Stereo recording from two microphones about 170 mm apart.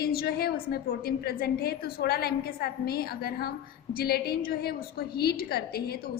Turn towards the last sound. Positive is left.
turn(degrees=65)  # may be behind; listen again after turning